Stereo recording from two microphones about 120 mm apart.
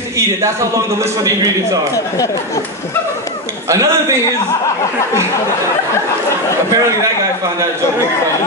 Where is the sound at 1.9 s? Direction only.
25° left (ahead or behind).